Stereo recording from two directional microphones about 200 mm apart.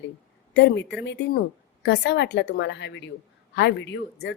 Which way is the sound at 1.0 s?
55° left (ahead or behind).